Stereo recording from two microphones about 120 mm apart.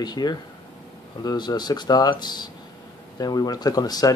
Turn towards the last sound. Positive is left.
turn(degrees=30)  # may be behind; listen again after turning